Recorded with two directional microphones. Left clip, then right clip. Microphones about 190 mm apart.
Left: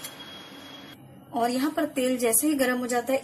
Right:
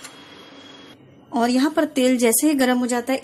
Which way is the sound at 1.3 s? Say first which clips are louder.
Right 6 dB; 55° right (ahead or behind).